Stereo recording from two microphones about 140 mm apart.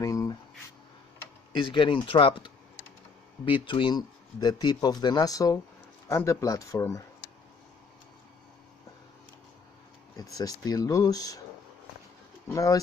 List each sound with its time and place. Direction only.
0.0 s a sound: 25° left (ahead or behind)
1.5 s speech: 35° left (ahead or behind)
10.3 s speech: 25° left (ahead or behind)
12.5 s speech: 25° left (ahead or behind)